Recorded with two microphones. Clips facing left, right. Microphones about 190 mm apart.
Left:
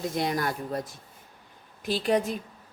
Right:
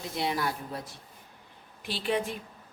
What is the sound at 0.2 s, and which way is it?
A woman's voice, 45° left (ahead or behind).